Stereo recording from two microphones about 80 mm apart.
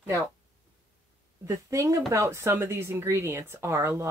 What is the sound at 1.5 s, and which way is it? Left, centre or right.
Speech, right.